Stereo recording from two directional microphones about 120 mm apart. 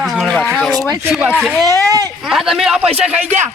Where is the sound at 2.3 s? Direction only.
Centre (ahead or behind).